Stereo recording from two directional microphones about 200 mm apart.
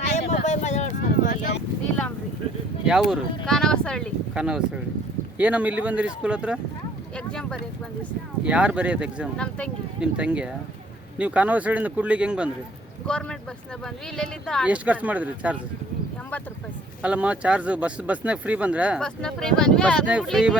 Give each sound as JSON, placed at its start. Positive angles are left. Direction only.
{"t": 0.4, "sound": "a sound", "side_deg": 35}
{"t": 2.8, "sound": "speech", "side_deg": -5}
{"t": 8.4, "sound": "speech", "side_deg": -5}
{"t": 9.4, "sound": "speech", "side_deg": 5}
{"t": 10.0, "sound": "speech", "side_deg": -5}
{"t": 13.1, "sound": "speech", "side_deg": 5}
{"t": 17.0, "sound": "speech", "side_deg": -5}